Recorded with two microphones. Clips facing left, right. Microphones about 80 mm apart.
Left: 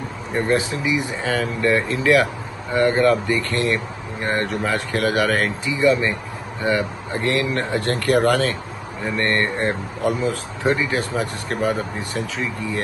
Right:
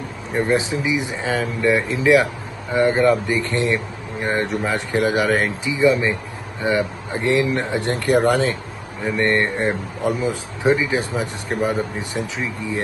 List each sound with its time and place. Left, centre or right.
0.3 s speech: centre